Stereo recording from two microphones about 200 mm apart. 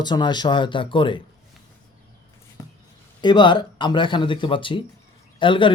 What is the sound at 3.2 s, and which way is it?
Speech, 20° left (ahead or behind).